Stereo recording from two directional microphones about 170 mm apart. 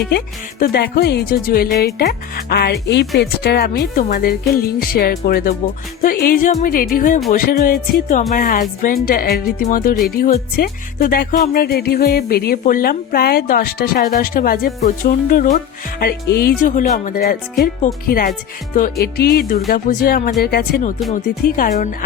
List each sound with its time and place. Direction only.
0.6 s speech: 70° left (ahead or behind)
16.6 s speech: 50° left (ahead or behind)